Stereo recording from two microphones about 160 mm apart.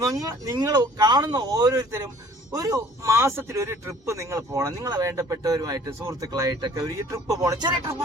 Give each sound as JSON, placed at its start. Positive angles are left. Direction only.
{"t": 0.0, "sound": "speech", "side_deg": -20}